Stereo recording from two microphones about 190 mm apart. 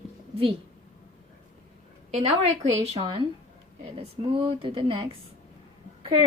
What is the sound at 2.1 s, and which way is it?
A woman's voice, 35° right (ahead or behind).